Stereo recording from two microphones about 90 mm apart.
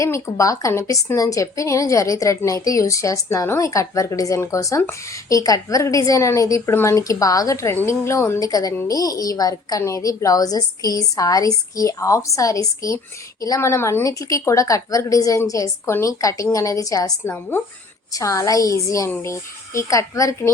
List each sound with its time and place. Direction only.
0.0 s a woman's voice: 35° left (ahead or behind)
8.4 s a woman's voice: 45° left (ahead or behind)